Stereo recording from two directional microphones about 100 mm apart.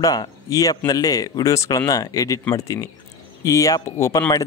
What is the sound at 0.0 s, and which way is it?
A man's voice, 40° left (ahead or behind).